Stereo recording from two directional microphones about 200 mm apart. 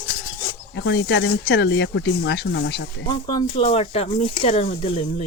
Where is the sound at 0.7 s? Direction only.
60° left (ahead or behind).